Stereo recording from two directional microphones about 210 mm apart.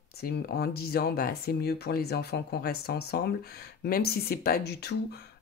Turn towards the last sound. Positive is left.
turn(degrees=50)  # may be behind; listen again after turning